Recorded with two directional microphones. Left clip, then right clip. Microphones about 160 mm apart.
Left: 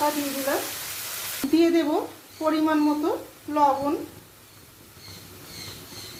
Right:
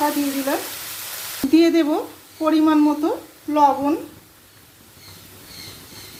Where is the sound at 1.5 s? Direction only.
35° right (ahead or behind).